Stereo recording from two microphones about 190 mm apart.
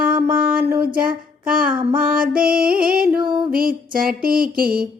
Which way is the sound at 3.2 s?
25° right (ahead or behind).